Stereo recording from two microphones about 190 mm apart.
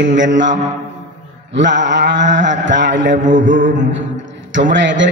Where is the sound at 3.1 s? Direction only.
45° right (ahead or behind).